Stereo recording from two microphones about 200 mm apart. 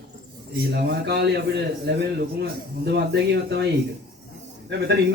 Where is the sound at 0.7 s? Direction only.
55° right (ahead or behind).